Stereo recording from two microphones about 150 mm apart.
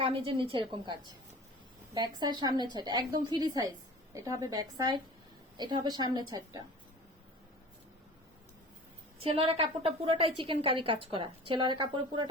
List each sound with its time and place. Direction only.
0.0 s a woman's voice: 35° right (ahead or behind)
9.2 s a woman's voice: 40° right (ahead or behind)